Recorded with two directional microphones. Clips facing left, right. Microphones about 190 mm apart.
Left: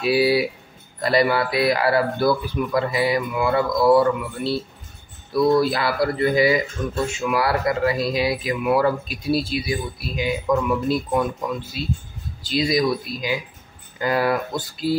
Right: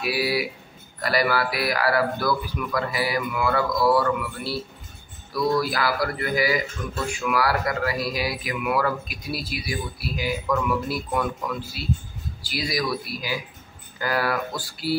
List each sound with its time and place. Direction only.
0.0 s speech: 25° left (ahead or behind)